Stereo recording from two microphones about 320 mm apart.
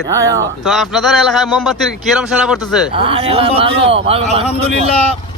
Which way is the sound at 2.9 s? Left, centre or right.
Centre.